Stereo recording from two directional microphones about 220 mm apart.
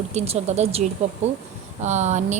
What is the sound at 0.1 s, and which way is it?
A woman's voice, 30° right (ahead or behind).